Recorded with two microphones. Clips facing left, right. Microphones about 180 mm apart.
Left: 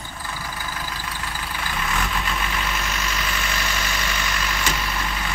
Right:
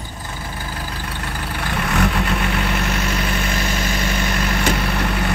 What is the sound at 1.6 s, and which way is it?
Vehicle, 65° right (ahead or behind).